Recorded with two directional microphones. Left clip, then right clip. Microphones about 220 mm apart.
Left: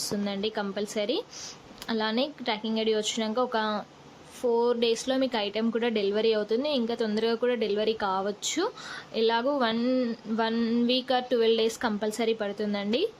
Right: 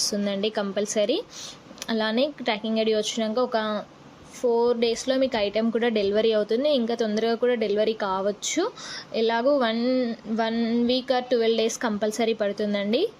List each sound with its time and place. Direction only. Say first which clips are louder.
0.3 s a woman's voice: right 4 dB; 10° right (ahead or behind)